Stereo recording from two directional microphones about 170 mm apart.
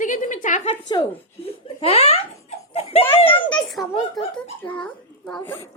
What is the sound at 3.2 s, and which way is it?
Speech, 30° left (ahead or behind).